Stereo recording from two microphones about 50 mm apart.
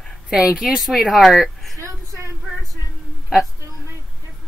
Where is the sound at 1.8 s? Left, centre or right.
Right.